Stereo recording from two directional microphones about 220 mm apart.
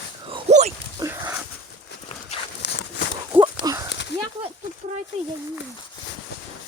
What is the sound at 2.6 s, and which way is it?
Horse, 50° left (ahead or behind).